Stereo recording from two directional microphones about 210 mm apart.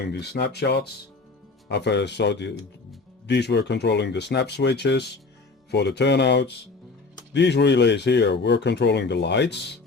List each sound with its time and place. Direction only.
0.0 s speech: 50° left (ahead or behind)